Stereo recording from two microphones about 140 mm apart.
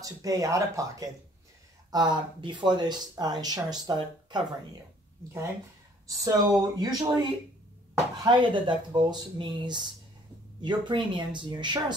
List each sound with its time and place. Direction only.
0.0 s speech: 25° right (ahead or behind)
6.0 s speech: 25° right (ahead or behind)